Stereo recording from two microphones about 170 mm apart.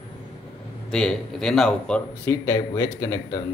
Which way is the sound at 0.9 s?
5° left (ahead or behind).